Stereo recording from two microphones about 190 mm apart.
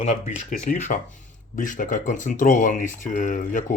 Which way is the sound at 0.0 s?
35° left (ahead or behind).